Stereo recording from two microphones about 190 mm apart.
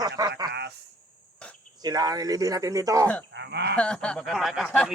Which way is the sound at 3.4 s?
65° right (ahead or behind).